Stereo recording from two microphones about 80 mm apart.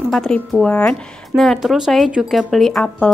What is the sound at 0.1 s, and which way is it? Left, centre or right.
Speech, centre.